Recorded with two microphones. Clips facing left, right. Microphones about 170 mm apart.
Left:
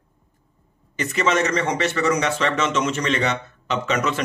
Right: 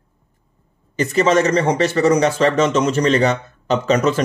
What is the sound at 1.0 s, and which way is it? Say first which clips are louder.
Speech: right 6 dB; 35° right (ahead or behind).